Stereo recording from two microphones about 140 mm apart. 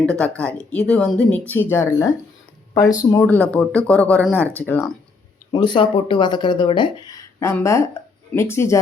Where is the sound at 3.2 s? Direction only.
10° left (ahead or behind).